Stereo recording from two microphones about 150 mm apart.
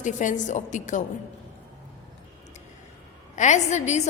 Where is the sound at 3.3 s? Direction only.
55° left (ahead or behind).